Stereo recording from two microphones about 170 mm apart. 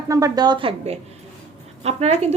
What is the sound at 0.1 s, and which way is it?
A woman's voice, 20° right (ahead or behind).